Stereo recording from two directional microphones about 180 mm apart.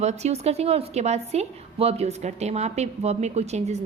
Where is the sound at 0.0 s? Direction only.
40° right (ahead or behind).